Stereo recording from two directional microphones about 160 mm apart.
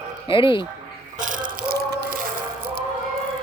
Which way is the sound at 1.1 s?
55° right (ahead or behind).